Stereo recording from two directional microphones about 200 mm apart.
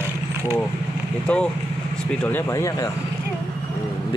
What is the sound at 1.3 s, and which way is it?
Speech, 5° left (ahead or behind).